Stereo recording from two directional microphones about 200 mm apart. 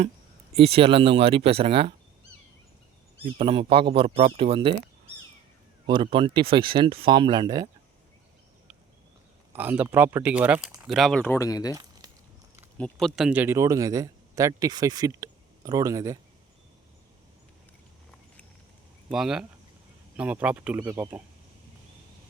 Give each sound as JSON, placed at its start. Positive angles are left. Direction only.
{"t": 0.5, "sound": "speech", "side_deg": -30}
{"t": 3.2, "sound": "speech", "side_deg": -30}
{"t": 5.8, "sound": "speech", "side_deg": -25}
{"t": 9.5, "sound": "speech", "side_deg": -10}
{"t": 11.7, "sound": "a sound", "side_deg": -20}
{"t": 12.7, "sound": "speech", "side_deg": 5}
{"t": 19.0, "sound": "speech", "side_deg": 0}